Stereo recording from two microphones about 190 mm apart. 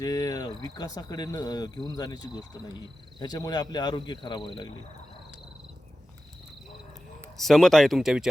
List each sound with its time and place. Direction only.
0.0 s speech: 20° left (ahead or behind)
7.3 s speech: centre (ahead or behind)